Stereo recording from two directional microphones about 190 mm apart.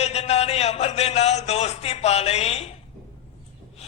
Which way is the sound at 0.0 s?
35° left (ahead or behind).